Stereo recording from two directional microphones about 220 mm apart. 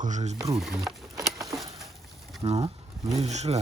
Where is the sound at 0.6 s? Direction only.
Centre (ahead or behind).